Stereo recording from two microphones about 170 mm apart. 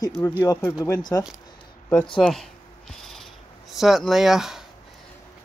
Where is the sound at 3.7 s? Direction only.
Centre (ahead or behind).